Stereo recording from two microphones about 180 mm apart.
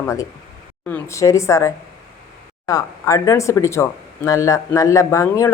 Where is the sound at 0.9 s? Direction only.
10° left (ahead or behind).